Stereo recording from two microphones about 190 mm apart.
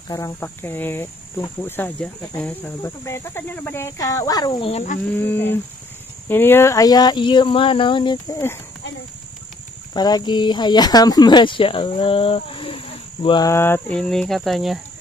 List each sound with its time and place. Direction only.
0.1 s speech: 15° left (ahead or behind); by 5.0 s 40° left (ahead or behind)
5.1 s speech: 10° left (ahead or behind)
9.9 s speech: 20° left (ahead or behind); by 14.8 s centre (ahead or behind)